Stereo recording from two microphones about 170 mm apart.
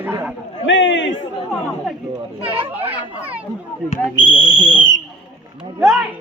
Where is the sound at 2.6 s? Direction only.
10° right (ahead or behind).